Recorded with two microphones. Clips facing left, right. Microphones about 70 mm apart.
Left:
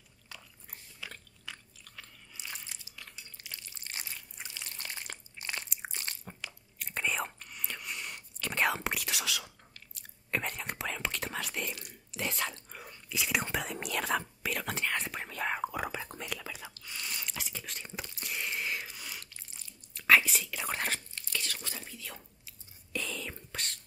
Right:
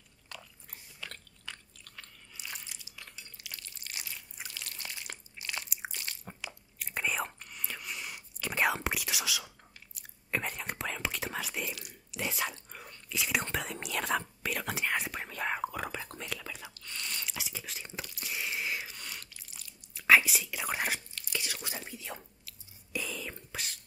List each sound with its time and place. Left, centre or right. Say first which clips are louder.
0.3 s biting: right 2 dB; centre
2.4 s a sound: even; centre
3.5 s a sound: left 1 dB; left
4.4 s water: right 2 dB; centre
5.1 s a sound: left 1 dB; left
5.9 s biting: left 1 dB; left
6.2 s whispering: right 1 dB; centre
16.8 s chewing: even; centre
17.4 s whispering: even; centre
18.2 s a sound: even; centre
19.9 s whispering: right 1 dB; centre; by 22.2 s right
22.9 s whispering: even; centre